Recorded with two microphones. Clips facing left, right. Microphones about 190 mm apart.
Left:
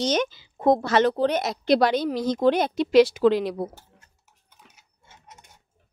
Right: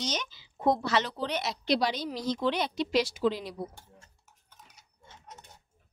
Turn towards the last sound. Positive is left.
turn(degrees=10)  # may be behind; listen again after turning